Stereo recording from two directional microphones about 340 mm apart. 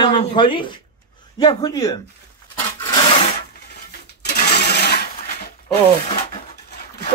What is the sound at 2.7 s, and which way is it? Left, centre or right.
Rub, centre.